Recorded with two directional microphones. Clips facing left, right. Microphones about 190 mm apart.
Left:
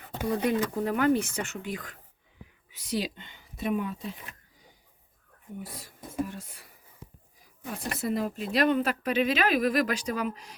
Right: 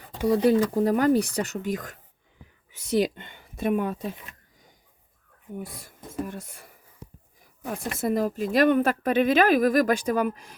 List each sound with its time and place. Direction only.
0.3 s speech: 35° right (ahead or behind); by 4.1 s 55° right (ahead or behind)
5.5 s speech: 50° right (ahead or behind)